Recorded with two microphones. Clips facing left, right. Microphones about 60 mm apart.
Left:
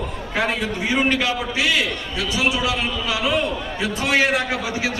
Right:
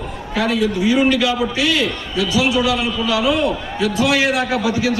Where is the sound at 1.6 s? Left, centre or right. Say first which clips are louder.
Right 3 dB; centre.